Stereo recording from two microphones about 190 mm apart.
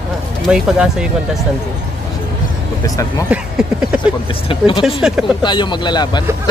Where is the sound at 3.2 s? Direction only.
5° right (ahead or behind).